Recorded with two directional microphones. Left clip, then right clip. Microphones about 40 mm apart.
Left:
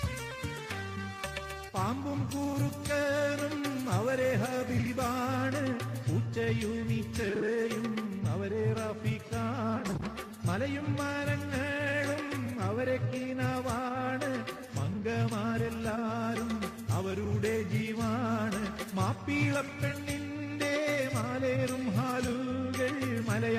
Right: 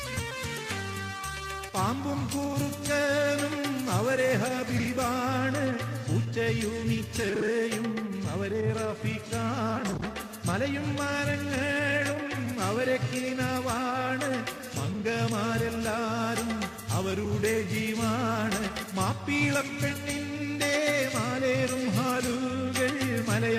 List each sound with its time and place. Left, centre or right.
1.7 s music: centre
2.9 s music: right
4.9 s music: centre
9.4 s music: right
11.5 s music: centre
13.4 s music: right
15.4 s music: right
17.0 s music: centre
18.2 s music: right
21.2 s music: right
22.8 s music: right